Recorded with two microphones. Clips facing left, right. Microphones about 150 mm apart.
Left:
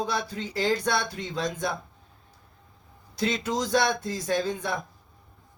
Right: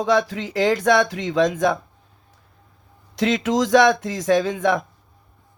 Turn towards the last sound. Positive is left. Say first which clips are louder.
# right 9 dB
turn(degrees=-90)